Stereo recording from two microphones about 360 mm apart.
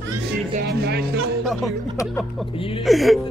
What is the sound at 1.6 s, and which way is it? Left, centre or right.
Speech, centre.